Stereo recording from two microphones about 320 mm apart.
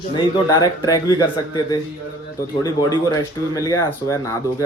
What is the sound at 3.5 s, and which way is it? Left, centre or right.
Speech, centre.